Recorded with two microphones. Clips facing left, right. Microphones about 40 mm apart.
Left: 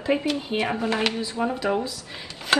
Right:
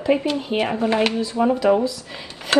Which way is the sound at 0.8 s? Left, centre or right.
Right.